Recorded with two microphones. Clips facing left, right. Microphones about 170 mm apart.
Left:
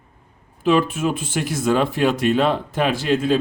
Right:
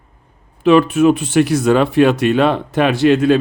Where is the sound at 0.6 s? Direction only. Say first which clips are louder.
Right 7 dB; 70° right (ahead or behind).